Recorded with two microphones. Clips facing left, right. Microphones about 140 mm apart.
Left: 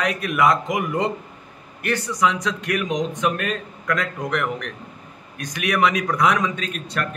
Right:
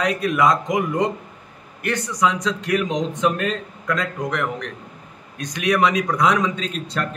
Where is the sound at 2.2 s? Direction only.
25° right (ahead or behind).